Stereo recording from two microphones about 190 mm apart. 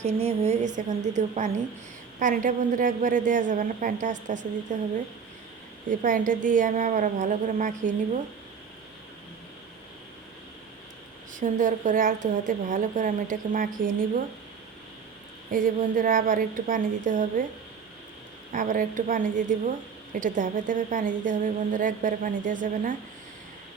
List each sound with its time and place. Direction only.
0.2 s a woman's voice: 35° right (ahead or behind)
5.9 s a woman's voice: 45° right (ahead or behind)
11.3 s a woman's voice: 45° right (ahead or behind)
15.5 s a woman's voice: 45° right (ahead or behind)
18.5 s a woman's voice: 45° right (ahead or behind)